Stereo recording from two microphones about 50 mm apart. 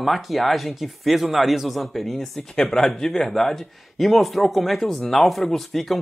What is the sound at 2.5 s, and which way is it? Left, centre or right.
Speech, centre.